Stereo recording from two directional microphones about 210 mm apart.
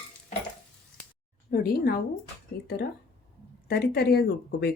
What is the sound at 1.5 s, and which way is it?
Speech, 45° left (ahead or behind).